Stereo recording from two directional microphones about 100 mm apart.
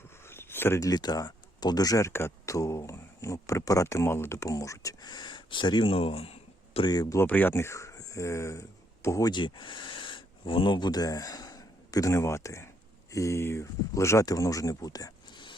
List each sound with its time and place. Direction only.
0.3 s zipper: 25° left (ahead or behind)
0.9 s speech: 40° left (ahead or behind); by 6.3 s 75° left (ahead or behind)
6.8 s speech: 40° left (ahead or behind)
7.2 s speech: 20° left (ahead or behind)
9.2 s speech: 50° left (ahead or behind)